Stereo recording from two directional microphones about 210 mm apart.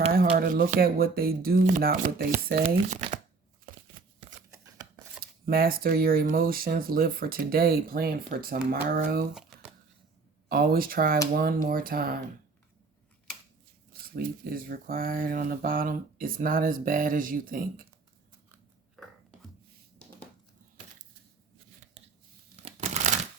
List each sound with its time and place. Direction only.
0.1 s speech: 45° right (ahead or behind)
2.6 s speech: 30° right (ahead or behind)
5.2 s speech: 45° right (ahead or behind)
9.3 s crumpling: centre (ahead or behind)
10.5 s speech: 45° right (ahead or behind)
14.0 s speech: 45° right (ahead or behind)
19.0 s a sound: centre (ahead or behind)
22.6 s crumpling: 35° right (ahead or behind)